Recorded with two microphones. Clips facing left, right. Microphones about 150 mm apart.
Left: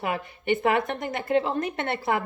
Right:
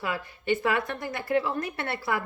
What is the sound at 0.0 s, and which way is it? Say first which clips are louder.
A woman's voice: left 3 dB; 20° left (ahead or behind).